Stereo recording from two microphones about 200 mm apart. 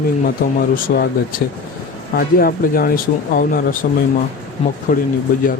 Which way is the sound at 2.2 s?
45° left (ahead or behind).